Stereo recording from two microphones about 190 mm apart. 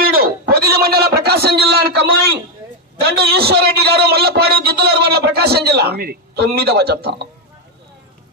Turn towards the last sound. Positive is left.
turn(degrees=-60)  # may be behind; listen again after turning